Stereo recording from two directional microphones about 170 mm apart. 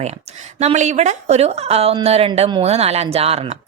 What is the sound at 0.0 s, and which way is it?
Speech, 40° right (ahead or behind).